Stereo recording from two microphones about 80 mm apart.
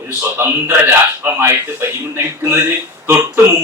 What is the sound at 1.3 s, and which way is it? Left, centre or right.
Speech, right.